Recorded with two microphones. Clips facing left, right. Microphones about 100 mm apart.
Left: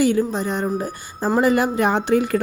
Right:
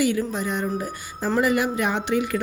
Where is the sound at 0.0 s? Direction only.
35° left (ahead or behind).